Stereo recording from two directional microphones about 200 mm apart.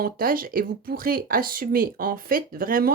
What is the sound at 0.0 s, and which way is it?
Speech, 45° right (ahead or behind).